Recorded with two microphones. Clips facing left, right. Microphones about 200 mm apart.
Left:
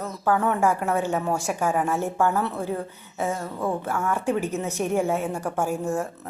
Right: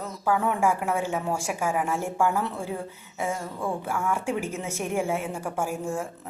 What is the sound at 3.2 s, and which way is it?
Speech, 40° left (ahead or behind).